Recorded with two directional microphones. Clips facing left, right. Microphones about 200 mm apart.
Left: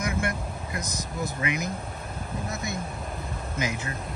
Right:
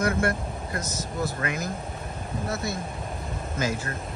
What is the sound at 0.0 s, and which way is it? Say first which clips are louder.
Speech: right 4 dB; 15° left (ahead or behind).